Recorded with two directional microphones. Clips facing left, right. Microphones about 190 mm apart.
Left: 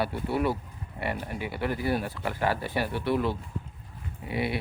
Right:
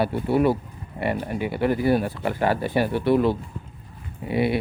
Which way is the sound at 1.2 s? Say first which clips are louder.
Right 7 dB; 50° right (ahead or behind).